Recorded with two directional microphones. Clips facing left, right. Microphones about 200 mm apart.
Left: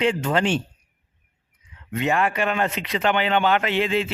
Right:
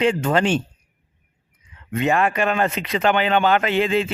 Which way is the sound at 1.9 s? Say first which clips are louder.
Right 3 dB; 45° right (ahead or behind).